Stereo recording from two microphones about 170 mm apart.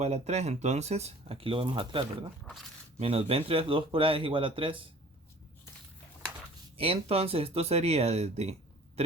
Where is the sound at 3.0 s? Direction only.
35° right (ahead or behind).